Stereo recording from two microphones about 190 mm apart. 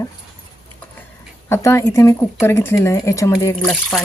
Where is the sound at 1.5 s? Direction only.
15° left (ahead or behind).